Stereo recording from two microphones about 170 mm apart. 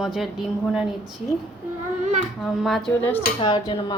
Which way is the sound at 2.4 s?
Centre (ahead or behind).